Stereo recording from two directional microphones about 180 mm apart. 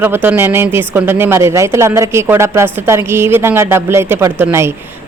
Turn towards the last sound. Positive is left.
turn(degrees=-15)  # may be behind; listen again after turning